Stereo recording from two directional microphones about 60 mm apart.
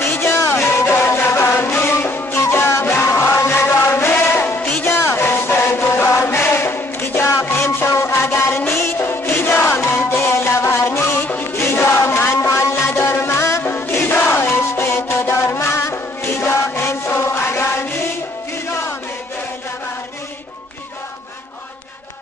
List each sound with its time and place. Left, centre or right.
0.0 s music: left
3.6 s chant: left
4.1 s music: left
4.8 s chant: left
7.4 s a sound: left
7.9 s music: left
11.5 s chant: left
13.7 s music: left